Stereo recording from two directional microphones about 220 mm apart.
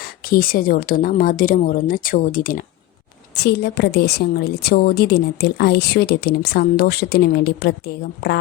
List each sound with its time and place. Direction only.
0.0 s a woman's voice: 40° left (ahead or behind)